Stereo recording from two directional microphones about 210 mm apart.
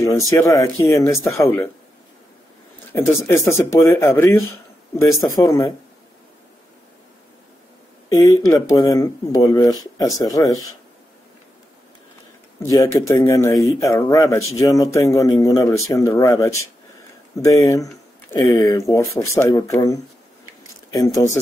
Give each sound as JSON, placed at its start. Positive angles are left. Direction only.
{"t": 0.0, "sound": "a man's voice", "side_deg": 15}
{"t": 2.9, "sound": "a man's voice", "side_deg": 10}
{"t": 5.4, "sound": "a man's voice", "side_deg": 15}
{"t": 8.1, "sound": "a man's voice", "side_deg": 15}
{"t": 12.6, "sound": "a man's voice", "side_deg": 15}